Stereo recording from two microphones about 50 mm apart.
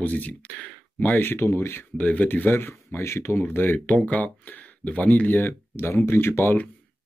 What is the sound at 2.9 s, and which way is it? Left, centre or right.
Speech, left.